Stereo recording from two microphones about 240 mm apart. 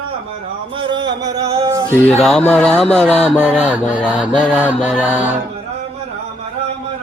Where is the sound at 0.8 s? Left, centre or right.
Centre.